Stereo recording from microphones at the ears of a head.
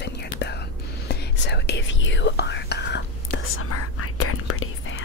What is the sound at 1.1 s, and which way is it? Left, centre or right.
Whispering, left.